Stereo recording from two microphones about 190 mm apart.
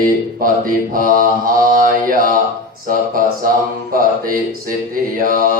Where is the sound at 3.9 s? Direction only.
50° right (ahead or behind).